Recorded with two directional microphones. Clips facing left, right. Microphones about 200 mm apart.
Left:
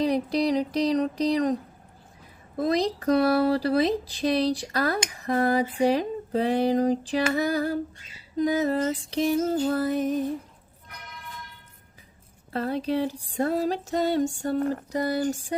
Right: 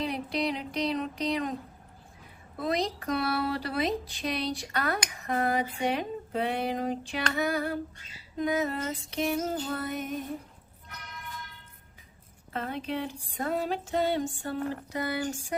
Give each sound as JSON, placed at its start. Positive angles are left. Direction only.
{"t": 0.0, "sound": "music", "side_deg": 35}
{"t": 2.6, "sound": "music", "side_deg": 35}
{"t": 12.5, "sound": "music", "side_deg": 35}